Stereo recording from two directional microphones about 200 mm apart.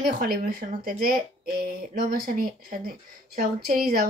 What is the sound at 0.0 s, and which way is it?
Speech, 45° right (ahead or behind).